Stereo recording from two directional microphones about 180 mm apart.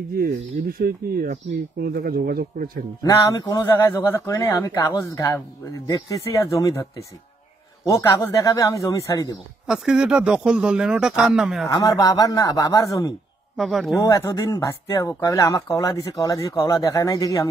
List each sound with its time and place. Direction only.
0.2 s speech: 55° right (ahead or behind)
3.0 s speech: 20° left (ahead or behind)
9.7 s speech: 5° right (ahead or behind)
11.7 s speech: 20° left (ahead or behind)
13.6 s speech: centre (ahead or behind)
13.9 s speech: 15° left (ahead or behind)